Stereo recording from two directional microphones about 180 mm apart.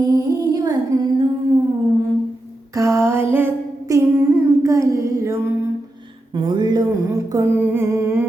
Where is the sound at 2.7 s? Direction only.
15° right (ahead or behind).